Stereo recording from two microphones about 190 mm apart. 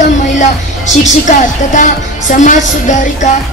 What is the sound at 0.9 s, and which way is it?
A woman's voice, 40° left (ahead or behind).